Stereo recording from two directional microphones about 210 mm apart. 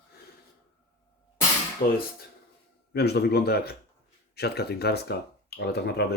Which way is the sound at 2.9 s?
50° left (ahead or behind).